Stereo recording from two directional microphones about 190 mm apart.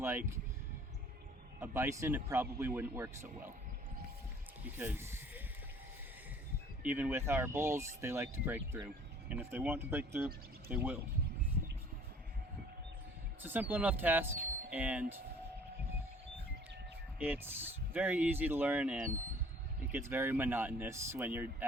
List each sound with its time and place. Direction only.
0.0 s speech: 15° right (ahead or behind)
1.5 s speech: 15° right (ahead or behind)
4.6 s speech: 10° right (ahead or behind)
6.8 s speech: 10° right (ahead or behind)
13.4 s speech: 10° right (ahead or behind)
14.3 s a sound: 45° right (ahead or behind)
14.7 s speech: 10° right (ahead or behind)
17.2 s speech: 10° right (ahead or behind)